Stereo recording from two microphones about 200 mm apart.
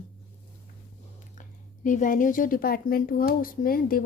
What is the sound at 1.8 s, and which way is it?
A woman's voice, 40° left (ahead or behind).